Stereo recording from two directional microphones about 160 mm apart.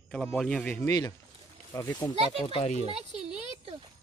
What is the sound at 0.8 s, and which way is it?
Speech, 20° left (ahead or behind).